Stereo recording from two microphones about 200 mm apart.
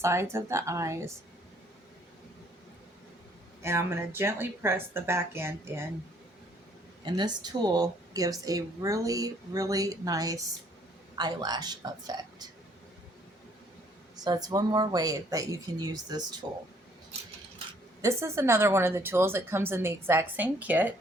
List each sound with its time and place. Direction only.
0.0 s a woman's voice: 15° right (ahead or behind)
3.6 s a woman's voice: 15° right (ahead or behind)
7.0 s a woman's voice: 20° right (ahead or behind)
14.2 s speech: 20° right (ahead or behind)
18.0 s a woman's voice: 15° right (ahead or behind)